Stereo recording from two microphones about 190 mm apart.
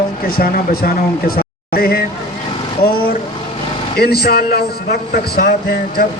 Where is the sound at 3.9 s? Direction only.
55° left (ahead or behind).